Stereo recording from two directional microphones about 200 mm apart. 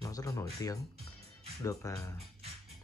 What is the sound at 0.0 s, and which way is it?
Speech, 15° left (ahead or behind).